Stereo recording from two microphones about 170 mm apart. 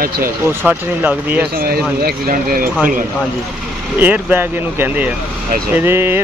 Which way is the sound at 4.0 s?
10° right (ahead or behind).